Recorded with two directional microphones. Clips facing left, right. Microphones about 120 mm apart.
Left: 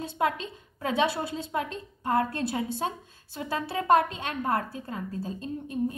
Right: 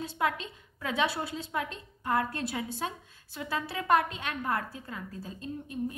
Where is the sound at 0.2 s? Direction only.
30° left (ahead or behind).